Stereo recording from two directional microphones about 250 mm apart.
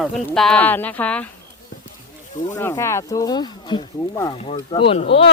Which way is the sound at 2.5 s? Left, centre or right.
Centre.